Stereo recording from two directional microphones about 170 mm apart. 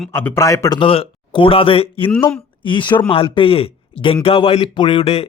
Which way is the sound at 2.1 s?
15° left (ahead or behind).